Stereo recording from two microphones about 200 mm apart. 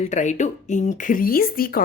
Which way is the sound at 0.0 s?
35° left (ahead or behind).